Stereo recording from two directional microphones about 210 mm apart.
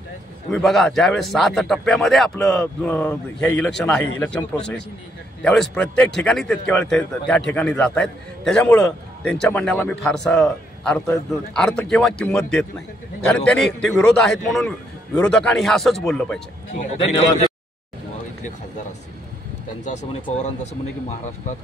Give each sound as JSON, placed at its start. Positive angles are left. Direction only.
{"t": 0.5, "sound": "a man's voice", "side_deg": 5}
{"t": 19.8, "sound": "speech", "side_deg": 35}